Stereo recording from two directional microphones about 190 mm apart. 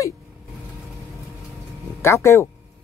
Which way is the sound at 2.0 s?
15° left (ahead or behind).